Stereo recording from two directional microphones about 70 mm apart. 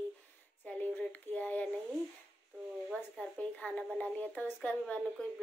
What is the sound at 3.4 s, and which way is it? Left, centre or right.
Speech, centre.